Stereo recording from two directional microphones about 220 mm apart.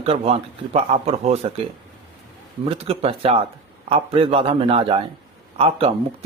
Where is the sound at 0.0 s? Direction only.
25° right (ahead or behind).